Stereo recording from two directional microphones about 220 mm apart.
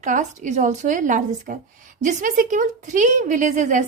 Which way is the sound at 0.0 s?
35° right (ahead or behind).